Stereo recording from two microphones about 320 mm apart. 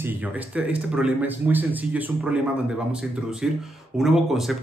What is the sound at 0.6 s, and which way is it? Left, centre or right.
Speech, centre.